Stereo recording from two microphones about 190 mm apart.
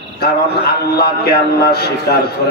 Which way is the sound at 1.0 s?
55° left (ahead or behind).